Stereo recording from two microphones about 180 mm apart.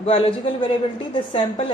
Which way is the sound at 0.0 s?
30° left (ahead or behind).